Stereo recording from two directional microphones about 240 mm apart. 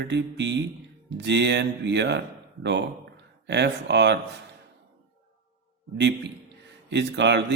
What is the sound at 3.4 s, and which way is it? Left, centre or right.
Speech, right.